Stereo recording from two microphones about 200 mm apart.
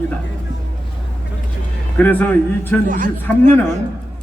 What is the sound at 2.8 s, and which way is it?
Speech, 40° right (ahead or behind).